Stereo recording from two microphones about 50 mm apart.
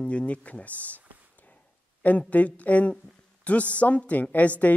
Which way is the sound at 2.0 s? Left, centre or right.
Left.